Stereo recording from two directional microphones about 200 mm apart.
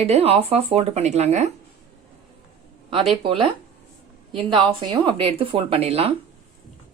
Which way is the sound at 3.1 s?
25° right (ahead or behind).